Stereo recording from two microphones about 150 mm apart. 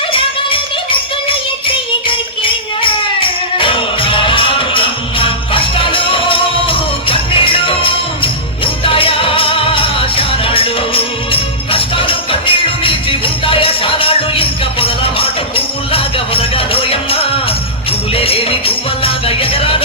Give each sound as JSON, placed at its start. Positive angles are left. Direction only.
{"t": 0.1, "sound": "music", "side_deg": 35}